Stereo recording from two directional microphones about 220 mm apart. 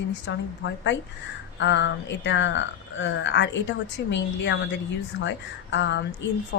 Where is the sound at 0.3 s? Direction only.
55° left (ahead or behind).